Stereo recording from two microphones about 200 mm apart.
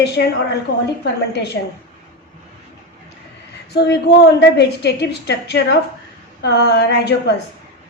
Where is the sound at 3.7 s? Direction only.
55° left (ahead or behind).